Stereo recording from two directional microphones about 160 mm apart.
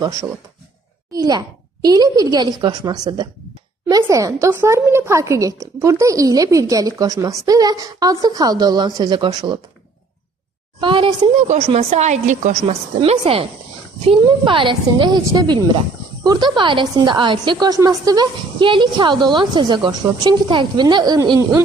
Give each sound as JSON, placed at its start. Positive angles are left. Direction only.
{"t": 0.0, "sound": "speech", "side_deg": -20}
{"t": 10.8, "sound": "a child's voice", "side_deg": -30}
{"t": 11.4, "sound": "speech", "side_deg": -45}
{"t": 13.0, "sound": "a child's voice", "side_deg": -35}